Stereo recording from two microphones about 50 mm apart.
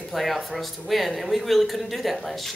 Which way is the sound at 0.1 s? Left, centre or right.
Centre.